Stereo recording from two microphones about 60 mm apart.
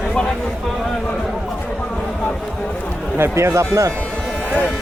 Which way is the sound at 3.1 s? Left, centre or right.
Right.